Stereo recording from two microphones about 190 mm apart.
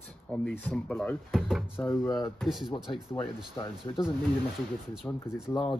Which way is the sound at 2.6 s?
25° left (ahead or behind).